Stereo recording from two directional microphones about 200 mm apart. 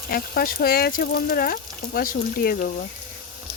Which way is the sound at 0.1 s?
50° left (ahead or behind).